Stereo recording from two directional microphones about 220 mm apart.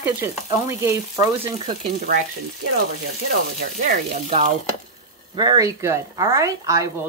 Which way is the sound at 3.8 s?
35° right (ahead or behind).